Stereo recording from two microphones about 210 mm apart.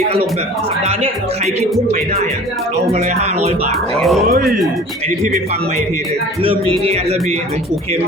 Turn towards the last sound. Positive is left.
turn(degrees=-30)  # may be behind; listen again after turning